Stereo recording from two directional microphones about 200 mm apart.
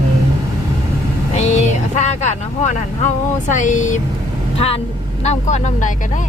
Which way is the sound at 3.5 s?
40° left (ahead or behind).